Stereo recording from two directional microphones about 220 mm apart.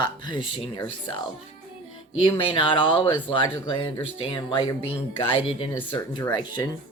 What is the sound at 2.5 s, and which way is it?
Speech, 25° left (ahead or behind).